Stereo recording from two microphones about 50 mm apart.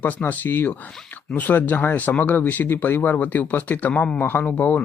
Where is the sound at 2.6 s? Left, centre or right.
Left.